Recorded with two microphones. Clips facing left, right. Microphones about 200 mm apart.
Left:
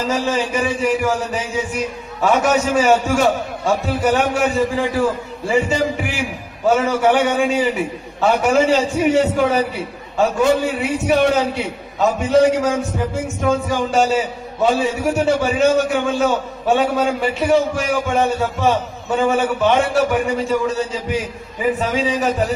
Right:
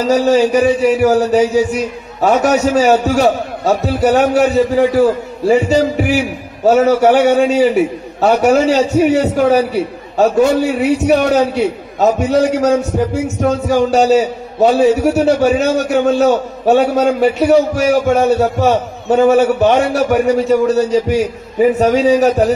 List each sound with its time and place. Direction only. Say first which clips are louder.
0.0 s a man's voice: right 9 dB; 40° right (ahead or behind)